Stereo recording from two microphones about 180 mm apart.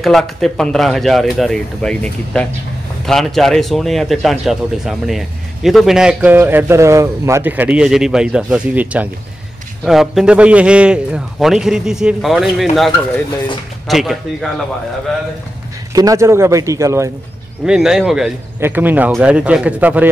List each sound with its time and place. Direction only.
0.0 s speech: centre (ahead or behind)
15.9 s a man's voice: 20° right (ahead or behind)
17.6 s a man's voice: 5° right (ahead or behind)